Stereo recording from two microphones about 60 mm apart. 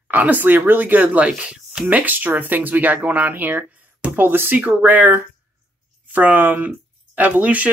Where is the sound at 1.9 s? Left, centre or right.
Right.